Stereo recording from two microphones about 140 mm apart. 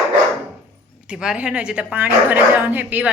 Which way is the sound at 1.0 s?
5° right (ahead or behind).